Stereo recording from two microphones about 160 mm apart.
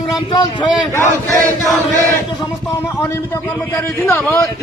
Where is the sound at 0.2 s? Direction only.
30° left (ahead or behind).